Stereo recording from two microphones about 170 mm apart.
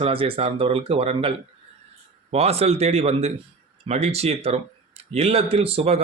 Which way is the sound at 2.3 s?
35° right (ahead or behind).